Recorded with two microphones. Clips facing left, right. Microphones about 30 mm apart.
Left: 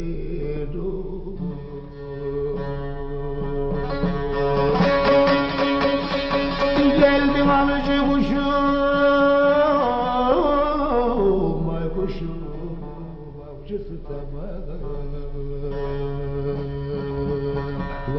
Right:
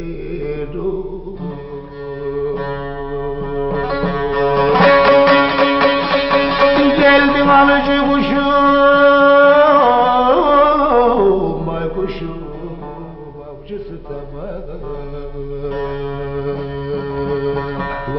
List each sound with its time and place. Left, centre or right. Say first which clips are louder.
0.3 s mantra: right 8 dB; right
2.2 s music: right 5 dB; centre
2.5 s music: right 6 dB; right
3.3 s music: right 6 dB; centre
3.7 s music: right 7 dB; right
7.1 s a sound: right 7 dB; right
8.7 s music: right 9 dB; right
9.0 s music: right 6 dB; right
10.1 s carnatic music: right 7 dB; right
11.4 s a sound: right 5 dB; right
15.7 s music: right 4 dB; right